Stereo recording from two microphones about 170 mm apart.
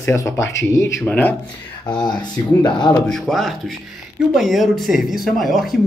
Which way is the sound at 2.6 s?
25° left (ahead or behind).